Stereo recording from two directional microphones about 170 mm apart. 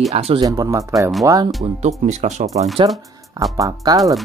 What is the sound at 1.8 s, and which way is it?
Speech, 40° right (ahead or behind).